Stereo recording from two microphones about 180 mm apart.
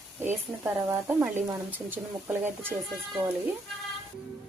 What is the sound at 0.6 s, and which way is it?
Speech, 10° right (ahead or behind).